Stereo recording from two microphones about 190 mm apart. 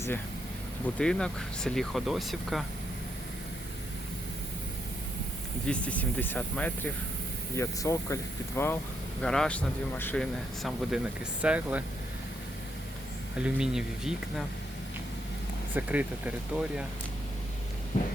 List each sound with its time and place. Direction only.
0.9 s speech: 5° left (ahead or behind)
5.6 s speech: 5° left (ahead or behind)
13.4 s speech: 5° right (ahead or behind)
15.7 s speech: 10° right (ahead or behind)
17.9 s a sound: 40° left (ahead or behind)